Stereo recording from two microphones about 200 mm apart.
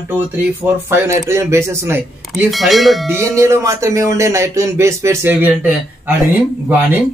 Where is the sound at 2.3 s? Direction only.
Centre (ahead or behind).